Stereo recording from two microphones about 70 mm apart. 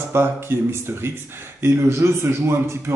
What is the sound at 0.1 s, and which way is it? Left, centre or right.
Speech, right.